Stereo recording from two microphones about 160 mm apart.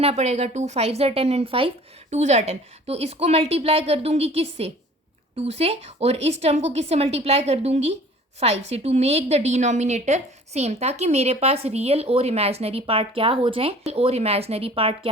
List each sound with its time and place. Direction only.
0.0 s a woman's voice: 45° right (ahead or behind)